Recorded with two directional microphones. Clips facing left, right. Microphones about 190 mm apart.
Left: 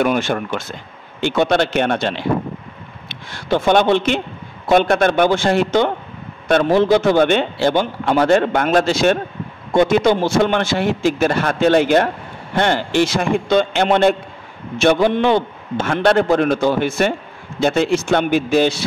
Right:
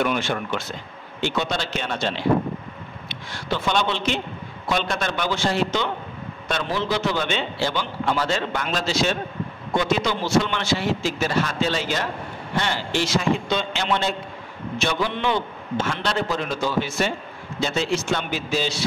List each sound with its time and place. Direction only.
0.0 s a man's voice: 50° left (ahead or behind)